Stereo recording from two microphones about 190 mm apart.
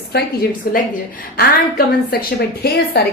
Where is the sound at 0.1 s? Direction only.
50° left (ahead or behind).